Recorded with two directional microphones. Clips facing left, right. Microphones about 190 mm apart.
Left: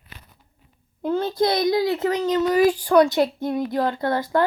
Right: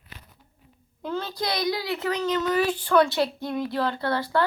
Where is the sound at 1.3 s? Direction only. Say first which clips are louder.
Left 8 dB; 25° left (ahead or behind).